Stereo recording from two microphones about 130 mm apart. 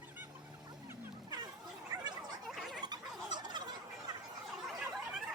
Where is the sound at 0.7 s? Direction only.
20° right (ahead or behind).